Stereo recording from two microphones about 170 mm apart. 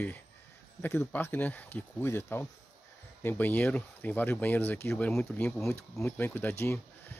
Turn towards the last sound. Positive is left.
turn(degrees=15)  # may be behind; listen again after turning